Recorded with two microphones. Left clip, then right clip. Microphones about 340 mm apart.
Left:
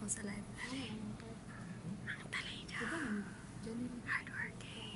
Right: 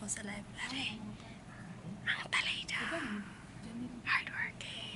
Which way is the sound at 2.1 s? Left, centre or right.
Centre.